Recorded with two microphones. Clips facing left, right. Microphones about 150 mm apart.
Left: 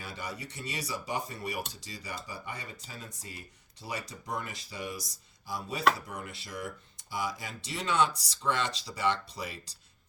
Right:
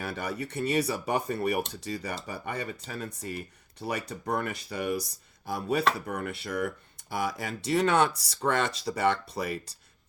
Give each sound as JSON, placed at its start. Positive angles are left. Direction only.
{"t": 0.0, "sound": "speech", "side_deg": -60}